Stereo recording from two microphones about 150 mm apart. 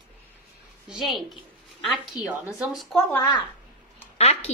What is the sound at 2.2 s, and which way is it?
Speech, 10° right (ahead or behind).